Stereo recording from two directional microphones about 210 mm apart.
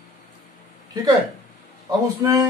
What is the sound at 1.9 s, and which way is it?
Speech, 15° right (ahead or behind).